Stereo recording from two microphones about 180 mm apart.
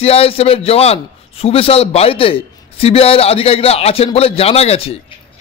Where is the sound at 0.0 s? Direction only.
30° left (ahead or behind).